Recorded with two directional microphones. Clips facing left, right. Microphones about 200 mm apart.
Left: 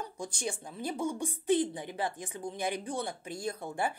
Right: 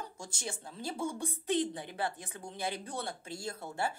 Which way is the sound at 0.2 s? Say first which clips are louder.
Left 6 dB; 15° left (ahead or behind).